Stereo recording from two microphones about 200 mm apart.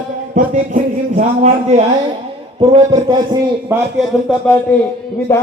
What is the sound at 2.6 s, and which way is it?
A man's voice, 20° right (ahead or behind).